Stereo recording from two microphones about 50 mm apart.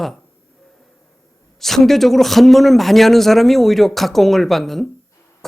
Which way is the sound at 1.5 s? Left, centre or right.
Centre.